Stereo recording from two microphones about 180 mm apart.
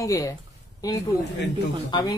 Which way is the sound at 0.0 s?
20° left (ahead or behind).